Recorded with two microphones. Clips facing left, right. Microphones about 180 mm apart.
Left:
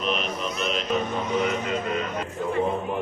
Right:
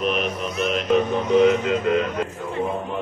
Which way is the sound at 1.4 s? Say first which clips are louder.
Right 8 dB; 90° right.